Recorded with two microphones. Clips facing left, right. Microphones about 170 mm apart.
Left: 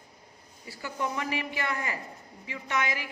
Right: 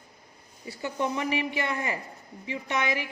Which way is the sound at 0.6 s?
25° right (ahead or behind).